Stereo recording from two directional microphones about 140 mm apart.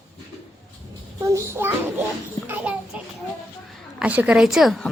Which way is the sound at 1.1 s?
20° right (ahead or behind).